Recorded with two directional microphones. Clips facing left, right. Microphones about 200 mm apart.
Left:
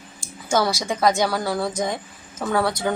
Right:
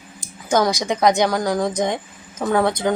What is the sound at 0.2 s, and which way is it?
A woman's voice, 15° right (ahead or behind).